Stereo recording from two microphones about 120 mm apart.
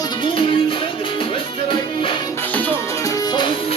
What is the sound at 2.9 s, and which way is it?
Music, 30° left (ahead or behind).